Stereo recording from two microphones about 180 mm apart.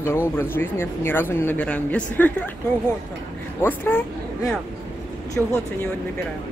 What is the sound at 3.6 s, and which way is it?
Speech, 10° left (ahead or behind).